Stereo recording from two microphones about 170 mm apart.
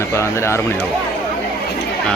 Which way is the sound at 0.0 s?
15° left (ahead or behind).